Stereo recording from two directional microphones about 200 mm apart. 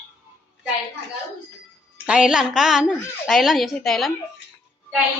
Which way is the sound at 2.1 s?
5° right (ahead or behind).